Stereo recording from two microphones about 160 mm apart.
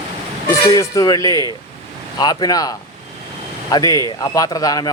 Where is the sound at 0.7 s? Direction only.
20° left (ahead or behind).